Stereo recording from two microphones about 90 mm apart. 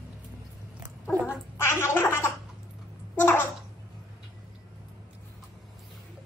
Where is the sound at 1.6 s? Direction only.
25° left (ahead or behind).